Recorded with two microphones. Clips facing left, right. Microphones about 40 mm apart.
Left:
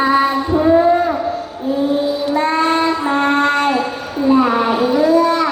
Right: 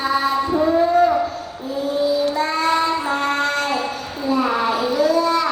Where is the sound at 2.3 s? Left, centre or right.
Left.